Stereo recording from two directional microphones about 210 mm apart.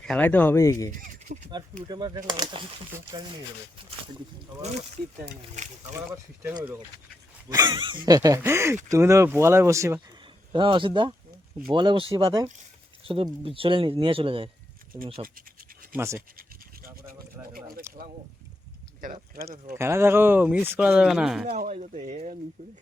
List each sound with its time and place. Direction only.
0.0 s speech: 5° left (ahead or behind)
0.9 s a sound: 40° right (ahead or behind)
1.9 s speech: 20° right (ahead or behind)
7.5 s speech: 20° right (ahead or behind)
15.4 s scratch: 40° right (ahead or behind)
16.0 s speech: 15° right (ahead or behind)
17.9 s a sound: 15° right (ahead or behind)
19.7 s speech: 10° right (ahead or behind)
21.5 s speech: 35° right (ahead or behind)